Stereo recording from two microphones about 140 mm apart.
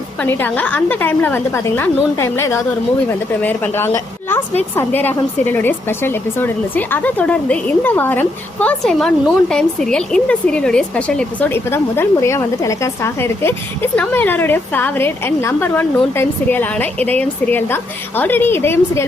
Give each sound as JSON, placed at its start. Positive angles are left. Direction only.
{"t": 0.2, "sound": "a woman's voice", "side_deg": 15}